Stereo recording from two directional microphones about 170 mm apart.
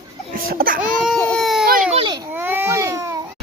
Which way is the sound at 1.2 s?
Centre (ahead or behind).